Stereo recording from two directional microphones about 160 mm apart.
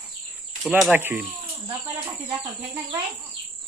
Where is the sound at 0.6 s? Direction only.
5° right (ahead or behind).